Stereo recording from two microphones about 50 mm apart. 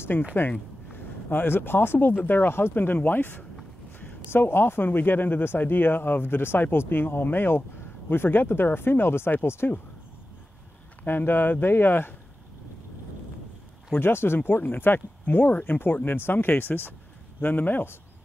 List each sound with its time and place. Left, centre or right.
0.0 s speech: left
9.6 s speech: left
11.1 s speech: left
13.9 s speech: left
14.6 s speech: left